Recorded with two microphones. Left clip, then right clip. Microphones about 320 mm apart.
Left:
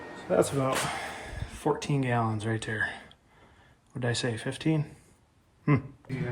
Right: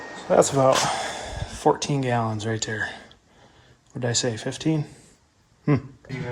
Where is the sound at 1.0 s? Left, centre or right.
Centre.